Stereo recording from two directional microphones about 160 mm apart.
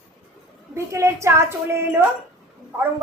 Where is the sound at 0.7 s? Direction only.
15° right (ahead or behind).